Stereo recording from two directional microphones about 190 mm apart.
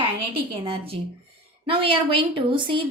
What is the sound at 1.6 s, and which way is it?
A woman's voice, 30° right (ahead or behind).